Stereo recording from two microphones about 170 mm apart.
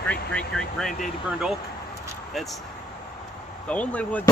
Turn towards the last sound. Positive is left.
turn(degrees=10)  # may be behind; listen again after turning